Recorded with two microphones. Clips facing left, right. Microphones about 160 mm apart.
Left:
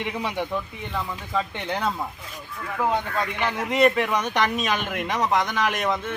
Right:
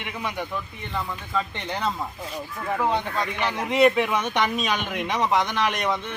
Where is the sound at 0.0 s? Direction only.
25° left (ahead or behind).